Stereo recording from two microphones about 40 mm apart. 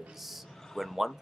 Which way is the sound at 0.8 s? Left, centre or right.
Centre.